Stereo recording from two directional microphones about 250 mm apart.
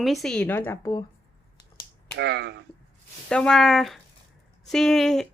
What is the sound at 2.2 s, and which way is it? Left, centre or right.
Speech, right.